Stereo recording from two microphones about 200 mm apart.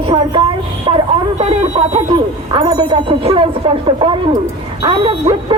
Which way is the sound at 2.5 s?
20° right (ahead or behind).